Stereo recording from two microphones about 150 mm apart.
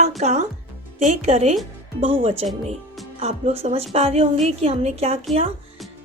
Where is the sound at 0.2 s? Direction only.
50° right (ahead or behind).